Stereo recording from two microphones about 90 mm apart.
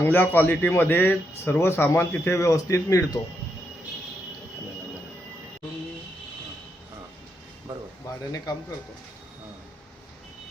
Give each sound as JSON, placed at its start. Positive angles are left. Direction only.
{"t": 0.0, "sound": "speech", "side_deg": 20}
{"t": 8.2, "sound": "speech", "side_deg": 40}